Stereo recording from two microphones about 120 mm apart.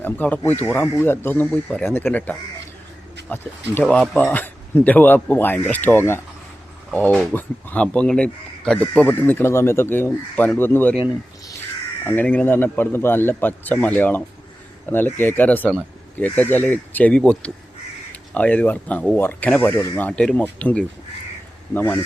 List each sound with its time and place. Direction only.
0.0 s speech: 15° left (ahead or behind)
12.0 s speech: 15° left (ahead or behind)